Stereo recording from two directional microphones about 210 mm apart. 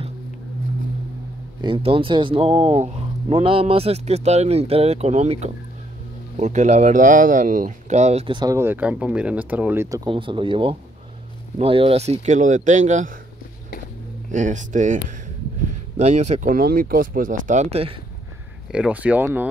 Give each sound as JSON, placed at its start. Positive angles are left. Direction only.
{"t": 1.6, "sound": "speech", "side_deg": -25}
{"t": 14.3, "sound": "speech", "side_deg": -35}
{"t": 18.7, "sound": "speech", "side_deg": -5}